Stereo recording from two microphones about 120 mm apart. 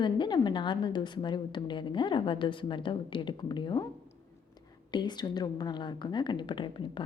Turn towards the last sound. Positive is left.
turn(degrees=40)  # may be behind; listen again after turning